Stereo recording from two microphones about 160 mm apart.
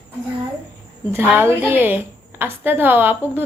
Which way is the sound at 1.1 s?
15° right (ahead or behind).